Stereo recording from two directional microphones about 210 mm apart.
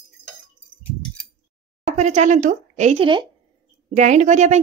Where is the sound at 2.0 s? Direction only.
35° right (ahead or behind).